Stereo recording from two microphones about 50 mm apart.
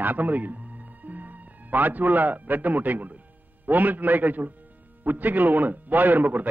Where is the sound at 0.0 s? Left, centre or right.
Right.